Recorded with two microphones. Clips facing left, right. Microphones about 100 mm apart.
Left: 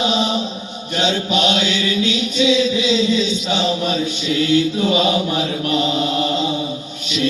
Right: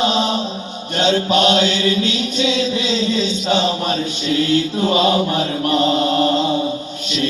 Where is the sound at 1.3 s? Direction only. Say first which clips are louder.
Right 4 dB; 45° right (ahead or behind).